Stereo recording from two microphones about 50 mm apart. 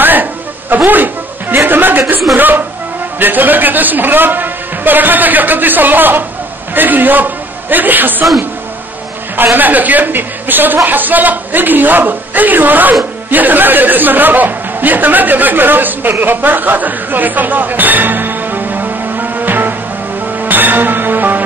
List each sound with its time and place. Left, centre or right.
0.0 s music: right
1.6 s chuckle: right
2.3 s a sound: right
3.2 s a woman's voice: right
9.4 s a woman's voice: right
20.4 s music: right